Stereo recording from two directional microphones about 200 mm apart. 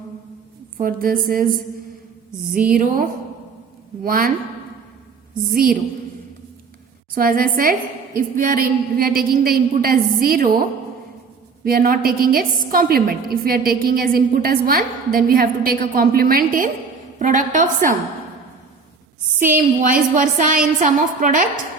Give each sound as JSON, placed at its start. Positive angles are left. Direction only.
{"t": 0.8, "sound": "a woman's voice", "side_deg": -45}
{"t": 2.7, "sound": "a woman's voice", "side_deg": -45}
{"t": 5.5, "sound": "a woman's voice", "side_deg": -45}
{"t": 7.1, "sound": "a woman's voice", "side_deg": -45}
{"t": 11.6, "sound": "a woman's voice", "side_deg": -45}
{"t": 19.5, "sound": "a woman's voice", "side_deg": -40}